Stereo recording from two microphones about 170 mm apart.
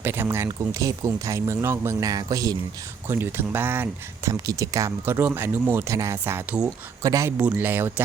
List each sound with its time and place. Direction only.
0.0 s speech: 15° right (ahead or behind)